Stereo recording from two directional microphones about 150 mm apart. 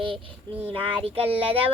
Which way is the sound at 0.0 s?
35° right (ahead or behind).